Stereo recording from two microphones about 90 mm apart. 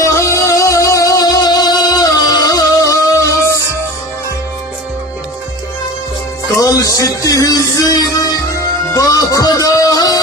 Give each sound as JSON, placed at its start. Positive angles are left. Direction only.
{"t": 0.0, "sound": "music", "side_deg": 35}
{"t": 6.6, "sound": "music", "side_deg": 40}